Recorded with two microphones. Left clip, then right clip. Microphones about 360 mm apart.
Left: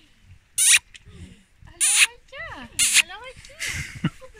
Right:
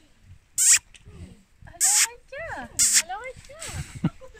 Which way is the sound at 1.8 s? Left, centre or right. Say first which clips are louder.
Left 4 dB; centre.